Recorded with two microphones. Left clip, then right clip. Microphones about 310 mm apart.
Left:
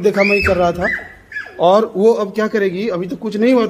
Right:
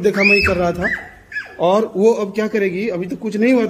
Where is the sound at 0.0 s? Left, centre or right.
Centre.